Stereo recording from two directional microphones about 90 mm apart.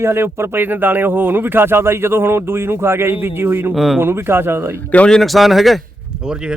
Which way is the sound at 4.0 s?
25° right (ahead or behind).